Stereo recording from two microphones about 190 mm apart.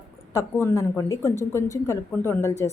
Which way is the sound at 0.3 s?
15° left (ahead or behind).